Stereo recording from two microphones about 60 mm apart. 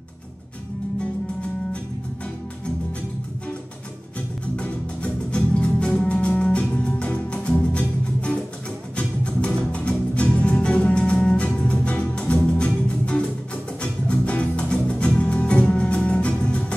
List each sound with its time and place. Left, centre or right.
4.6 s music: centre